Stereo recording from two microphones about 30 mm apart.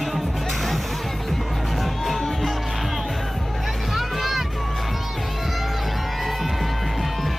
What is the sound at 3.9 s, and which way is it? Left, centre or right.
Music, centre.